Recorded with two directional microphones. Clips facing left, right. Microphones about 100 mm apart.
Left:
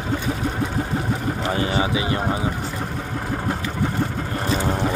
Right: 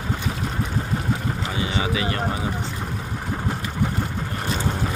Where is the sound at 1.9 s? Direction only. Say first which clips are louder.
Left 2 dB; 20° left (ahead or behind).